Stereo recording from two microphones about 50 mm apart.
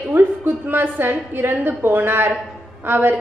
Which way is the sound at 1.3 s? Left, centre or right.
Right.